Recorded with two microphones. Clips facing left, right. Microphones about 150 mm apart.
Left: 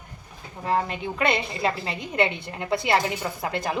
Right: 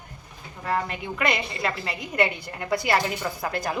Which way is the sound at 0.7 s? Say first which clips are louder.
Left 2 dB; 30° left (ahead or behind).